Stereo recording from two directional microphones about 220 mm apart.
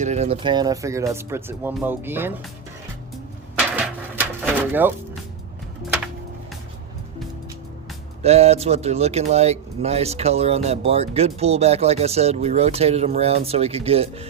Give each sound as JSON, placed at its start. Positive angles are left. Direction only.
{"t": 0.0, "sound": "speech", "side_deg": -30}
{"t": 3.8, "sound": "a sound", "side_deg": -5}
{"t": 8.2, "sound": "speech", "side_deg": -30}